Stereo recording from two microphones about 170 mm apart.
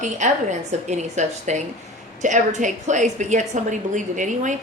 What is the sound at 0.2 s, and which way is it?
A woman's voice, 45° right (ahead or behind).